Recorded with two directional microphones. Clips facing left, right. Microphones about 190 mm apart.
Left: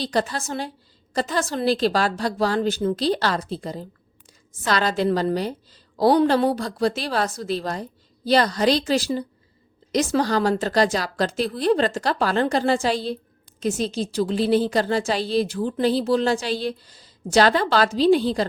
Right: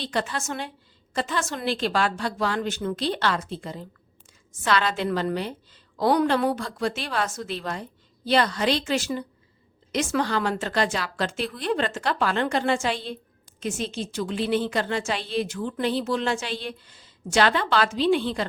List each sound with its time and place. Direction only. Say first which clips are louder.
0.0 s a woman's voice: left 4 dB; 35° left (ahead or behind)